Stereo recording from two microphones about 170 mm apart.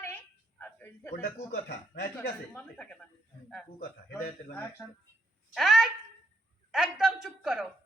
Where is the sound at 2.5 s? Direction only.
5° left (ahead or behind).